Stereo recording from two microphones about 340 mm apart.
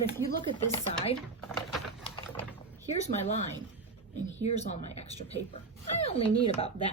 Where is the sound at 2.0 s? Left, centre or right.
Centre.